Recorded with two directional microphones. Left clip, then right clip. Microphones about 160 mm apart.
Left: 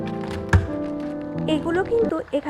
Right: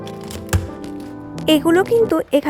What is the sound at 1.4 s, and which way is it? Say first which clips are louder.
Speech: right 8 dB; 45° right (ahead or behind).